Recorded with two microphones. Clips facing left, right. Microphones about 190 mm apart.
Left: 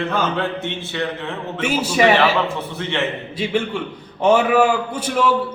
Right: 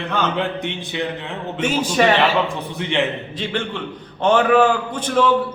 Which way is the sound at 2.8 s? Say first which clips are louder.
Right 3 dB; 15° right (ahead or behind).